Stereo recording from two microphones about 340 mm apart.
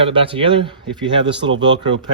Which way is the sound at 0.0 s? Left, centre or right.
Centre.